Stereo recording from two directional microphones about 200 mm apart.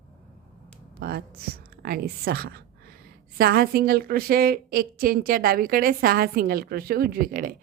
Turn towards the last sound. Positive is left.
turn(degrees=-45)  # may be behind; listen again after turning